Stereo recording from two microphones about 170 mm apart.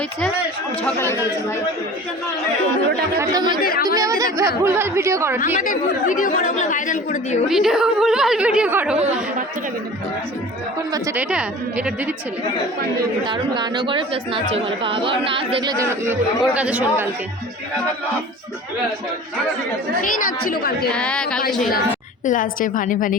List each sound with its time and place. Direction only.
0.9 s speech: 15° left (ahead or behind)
3.2 s speech: 25° right (ahead or behind)
3.6 s a woman's voice: 60° left (ahead or behind)
3.8 s a woman's voice: 20° right (ahead or behind)
5.6 s speech: 50° left (ahead or behind)
7.4 s speech: 5° right (ahead or behind)
10.9 s a woman's voice: 15° right (ahead or behind)
13.0 s speech: 25° right (ahead or behind)
16.4 s a woman's voice: 5° right (ahead or behind)
20.0 s a woman's voice: 50° left (ahead or behind)
20.9 s speech: 5° left (ahead or behind)
22.3 s speech: 50° left (ahead or behind)